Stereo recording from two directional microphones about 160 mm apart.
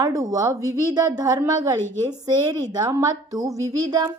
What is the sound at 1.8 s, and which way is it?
Speech, 15° left (ahead or behind).